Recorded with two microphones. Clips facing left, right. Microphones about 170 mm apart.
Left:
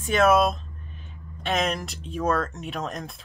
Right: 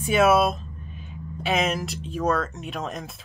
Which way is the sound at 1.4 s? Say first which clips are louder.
Right 1 dB; centre (ahead or behind).